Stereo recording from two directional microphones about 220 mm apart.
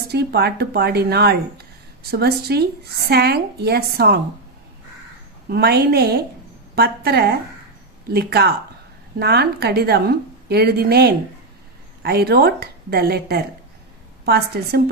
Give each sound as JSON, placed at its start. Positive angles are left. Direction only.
{"t": 0.1, "sound": "a woman's voice", "side_deg": -50}
{"t": 5.5, "sound": "a woman's voice", "side_deg": -45}